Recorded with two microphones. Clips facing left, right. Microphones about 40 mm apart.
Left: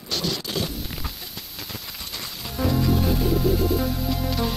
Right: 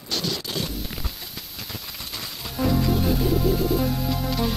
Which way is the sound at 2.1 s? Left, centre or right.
Centre.